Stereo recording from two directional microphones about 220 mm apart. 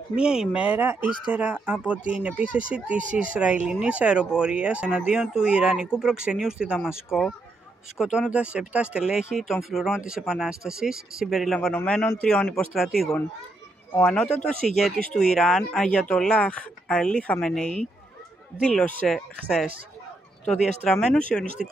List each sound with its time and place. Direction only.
0.1 s speech: 5° right (ahead or behind)
1.0 s speech: 20° left (ahead or behind)
1.3 s speech: 5° right (ahead or behind)
3.0 s speech: 35° right (ahead or behind)
3.3 s speech: 5° right (ahead or behind)
13.9 s speech: 5° left (ahead or behind)
21.0 s speech: 5° left (ahead or behind)